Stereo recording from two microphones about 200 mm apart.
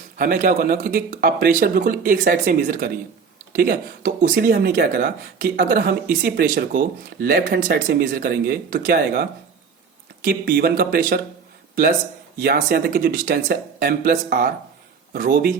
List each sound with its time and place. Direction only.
0.2 s speech: 45° right (ahead or behind)
12.4 s speech: 50° right (ahead or behind)